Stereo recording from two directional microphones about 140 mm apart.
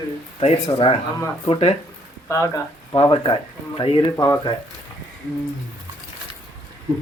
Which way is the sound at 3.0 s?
35° left (ahead or behind).